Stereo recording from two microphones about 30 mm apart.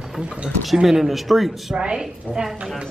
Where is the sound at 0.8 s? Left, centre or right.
Centre.